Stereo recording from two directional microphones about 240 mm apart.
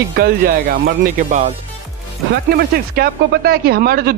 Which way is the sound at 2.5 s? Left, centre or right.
Right.